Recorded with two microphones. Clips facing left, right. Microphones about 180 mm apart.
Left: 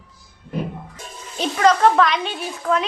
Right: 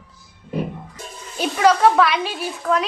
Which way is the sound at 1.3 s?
5° right (ahead or behind).